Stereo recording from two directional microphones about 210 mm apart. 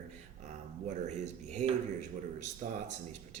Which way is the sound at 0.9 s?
35° right (ahead or behind).